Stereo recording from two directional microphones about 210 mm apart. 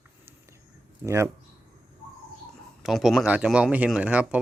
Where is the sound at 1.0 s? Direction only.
15° right (ahead or behind).